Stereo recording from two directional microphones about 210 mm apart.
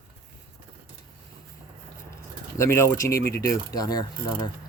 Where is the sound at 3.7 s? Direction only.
20° left (ahead or behind).